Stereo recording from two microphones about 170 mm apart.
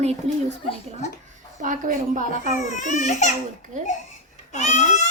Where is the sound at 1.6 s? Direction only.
50° right (ahead or behind).